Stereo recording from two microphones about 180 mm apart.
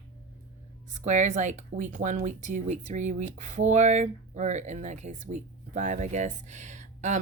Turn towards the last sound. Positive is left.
turn(degrees=-40)  # may be behind; listen again after turning